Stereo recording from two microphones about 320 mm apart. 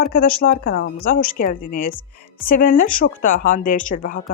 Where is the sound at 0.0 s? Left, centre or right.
Left.